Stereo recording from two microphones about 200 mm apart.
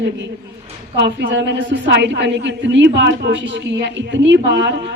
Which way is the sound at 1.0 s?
60° right (ahead or behind).